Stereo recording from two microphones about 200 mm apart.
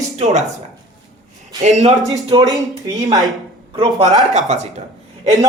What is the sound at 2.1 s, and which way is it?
Speech, 20° right (ahead or behind).